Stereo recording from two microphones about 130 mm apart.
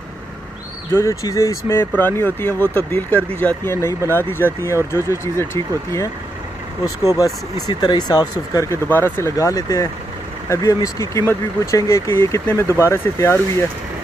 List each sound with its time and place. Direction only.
0.9 s speech: 25° left (ahead or behind)